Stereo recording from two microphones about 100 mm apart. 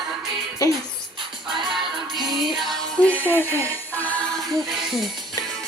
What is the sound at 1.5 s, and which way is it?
Music, 50° right (ahead or behind).